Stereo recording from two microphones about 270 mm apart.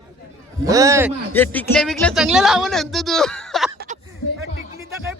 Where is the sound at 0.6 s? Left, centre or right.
Centre.